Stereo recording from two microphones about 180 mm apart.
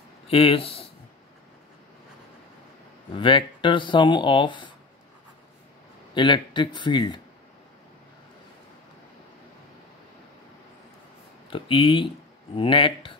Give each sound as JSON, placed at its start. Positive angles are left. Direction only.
{"t": 0.3, "sound": "speech", "side_deg": 30}
{"t": 3.2, "sound": "speech", "side_deg": 30}
{"t": 6.1, "sound": "speech", "side_deg": 25}
{"t": 11.5, "sound": "speech", "side_deg": 30}